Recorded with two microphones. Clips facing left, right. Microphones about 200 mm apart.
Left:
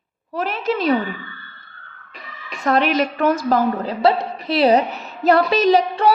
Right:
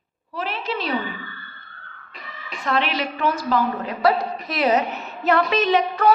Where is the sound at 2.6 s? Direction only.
45° left (ahead or behind).